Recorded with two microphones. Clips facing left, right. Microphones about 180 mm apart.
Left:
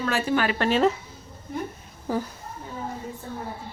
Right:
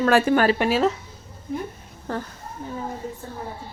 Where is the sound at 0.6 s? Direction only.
5° right (ahead or behind).